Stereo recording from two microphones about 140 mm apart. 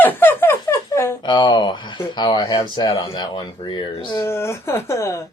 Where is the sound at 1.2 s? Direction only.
30° left (ahead or behind).